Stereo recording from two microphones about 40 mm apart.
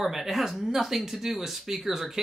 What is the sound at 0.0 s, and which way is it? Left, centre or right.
Speech, centre.